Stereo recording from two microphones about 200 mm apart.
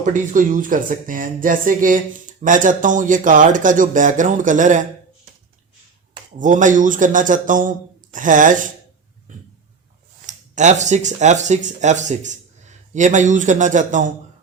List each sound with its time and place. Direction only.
0.0 s speech: 40° right (ahead or behind)
6.4 s speech: 40° right (ahead or behind)
10.2 s speech: 35° right (ahead or behind)